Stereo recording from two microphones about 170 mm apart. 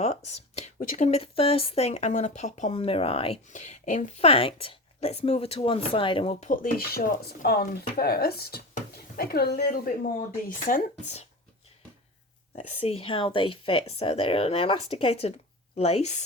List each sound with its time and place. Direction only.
0.0 s a sound: 40° left (ahead or behind)
0.8 s speech: 50° left (ahead or behind)
4.3 s speech: 35° left (ahead or behind)
6.4 s speech: 55° left (ahead or behind)
12.5 s speech: 35° left (ahead or behind)